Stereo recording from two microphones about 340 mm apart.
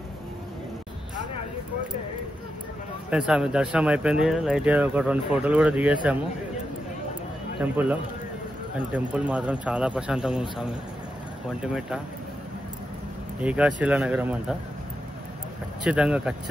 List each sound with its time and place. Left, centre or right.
3.1 s speech: centre
7.7 s speech: centre
11.6 s speech: centre
13.4 s speech: centre
15.8 s speech: centre